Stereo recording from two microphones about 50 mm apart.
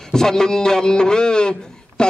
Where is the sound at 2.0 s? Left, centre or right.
Centre.